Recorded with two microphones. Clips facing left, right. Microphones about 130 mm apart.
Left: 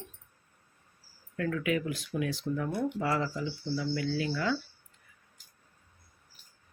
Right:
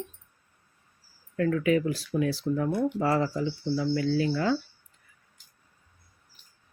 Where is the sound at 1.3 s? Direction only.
35° right (ahead or behind).